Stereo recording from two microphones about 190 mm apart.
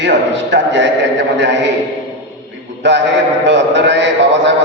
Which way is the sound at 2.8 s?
70° right (ahead or behind).